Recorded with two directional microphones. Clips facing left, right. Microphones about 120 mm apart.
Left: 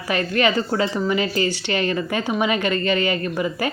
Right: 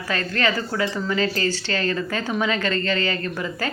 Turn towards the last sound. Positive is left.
turn(degrees=15)  # may be behind; listen again after turning